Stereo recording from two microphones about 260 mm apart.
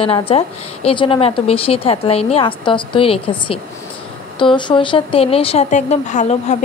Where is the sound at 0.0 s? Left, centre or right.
Left.